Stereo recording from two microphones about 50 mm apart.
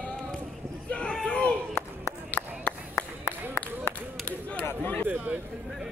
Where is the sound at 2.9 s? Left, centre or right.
Left.